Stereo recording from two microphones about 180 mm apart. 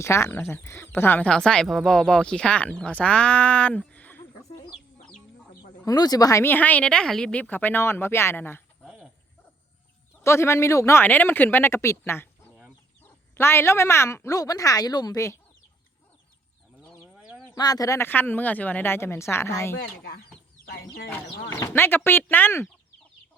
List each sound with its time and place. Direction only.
0.0 s speech: 15° left (ahead or behind)
5.8 s speech: 20° left (ahead or behind)
10.2 s speech: 15° left (ahead or behind)
13.3 s speech: 15° left (ahead or behind)
17.0 s bird: centre (ahead or behind)
17.5 s speech: 20° left (ahead or behind)
19.8 s speech: 60° left (ahead or behind)
21.5 s speech: 15° left (ahead or behind)